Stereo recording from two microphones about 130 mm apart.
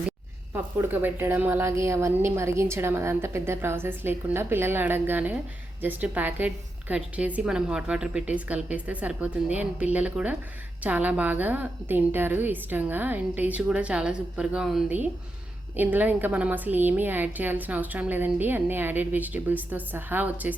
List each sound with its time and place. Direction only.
0.5 s a woman's voice: 15° right (ahead or behind)